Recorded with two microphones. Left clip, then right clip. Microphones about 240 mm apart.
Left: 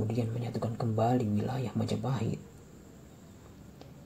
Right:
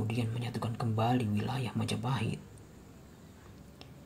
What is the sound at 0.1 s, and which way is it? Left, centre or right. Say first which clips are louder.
Speech: left 3 dB; right.